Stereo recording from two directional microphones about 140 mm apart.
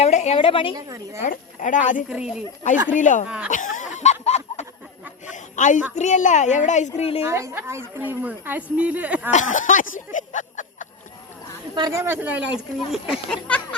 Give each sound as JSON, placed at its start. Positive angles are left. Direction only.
{"t": 0.0, "sound": "a sound", "side_deg": 50}
{"t": 0.3, "sound": "a woman's voice", "side_deg": 40}
{"t": 0.8, "sound": "a woman's voice", "side_deg": -25}
{"t": 1.3, "sound": "speech", "side_deg": 65}
{"t": 2.0, "sound": "speech", "side_deg": -5}
{"t": 2.9, "sound": "speech", "side_deg": 65}
{"t": 3.2, "sound": "a woman's voice", "side_deg": -5}
{"t": 3.5, "sound": "a sound", "side_deg": 65}
{"t": 6.0, "sound": "speech", "side_deg": 60}
{"t": 7.2, "sound": "a woman's voice", "side_deg": -20}
{"t": 9.3, "sound": "speech", "side_deg": 65}
{"t": 11.7, "sound": "a woman's voice", "side_deg": -25}
{"t": 13.3, "sound": "speech", "side_deg": 10}